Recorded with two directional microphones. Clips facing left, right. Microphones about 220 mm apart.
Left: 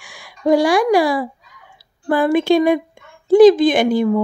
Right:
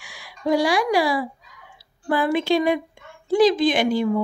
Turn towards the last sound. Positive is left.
turn(degrees=50)  # may be behind; listen again after turning